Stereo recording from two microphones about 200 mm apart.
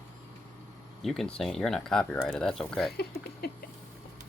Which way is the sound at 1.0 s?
Centre (ahead or behind).